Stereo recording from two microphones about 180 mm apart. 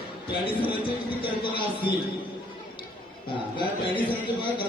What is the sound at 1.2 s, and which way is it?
Speech, 25° left (ahead or behind).